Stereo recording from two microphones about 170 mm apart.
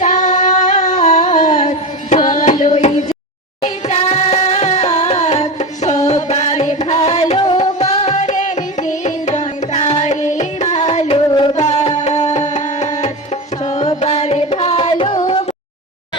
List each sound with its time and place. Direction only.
0.0 s singing: 45° left (ahead or behind)
3.6 s music: 40° left (ahead or behind)
7.3 s music: 30° left (ahead or behind)